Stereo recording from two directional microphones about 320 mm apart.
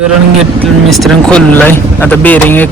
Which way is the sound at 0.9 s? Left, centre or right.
Centre.